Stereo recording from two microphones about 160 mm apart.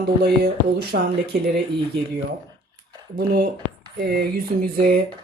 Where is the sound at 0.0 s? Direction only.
80° right.